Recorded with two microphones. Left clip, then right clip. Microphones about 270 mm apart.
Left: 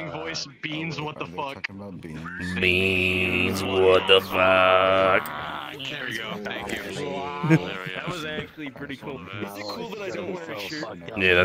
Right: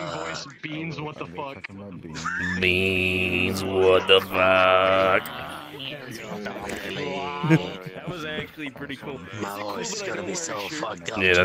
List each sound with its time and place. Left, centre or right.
0.3 s speech: centre
2.6 s speech: centre
7.0 s a sound: centre
11.1 s speech: centre